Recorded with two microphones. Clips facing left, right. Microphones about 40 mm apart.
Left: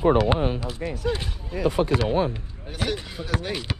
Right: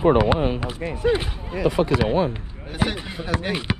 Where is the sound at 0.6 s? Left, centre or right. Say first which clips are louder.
Right 4 dB; right.